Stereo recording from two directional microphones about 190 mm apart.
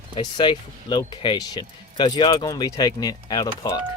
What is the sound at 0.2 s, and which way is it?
Speech, 25° left (ahead or behind).